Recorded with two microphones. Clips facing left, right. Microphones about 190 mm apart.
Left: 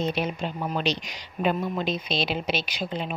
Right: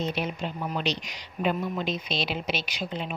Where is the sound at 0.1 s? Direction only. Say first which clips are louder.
Left 2 dB; 40° left (ahead or behind).